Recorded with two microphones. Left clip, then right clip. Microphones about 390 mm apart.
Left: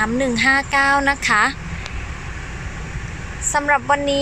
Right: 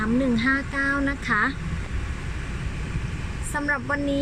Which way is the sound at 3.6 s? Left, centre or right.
Left.